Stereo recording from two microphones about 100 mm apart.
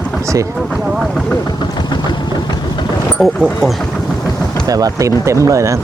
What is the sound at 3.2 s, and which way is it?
Speech, 10° left (ahead or behind).